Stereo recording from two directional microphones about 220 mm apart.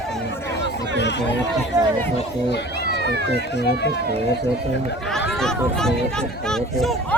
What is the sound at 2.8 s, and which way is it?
Run, 50° right (ahead or behind).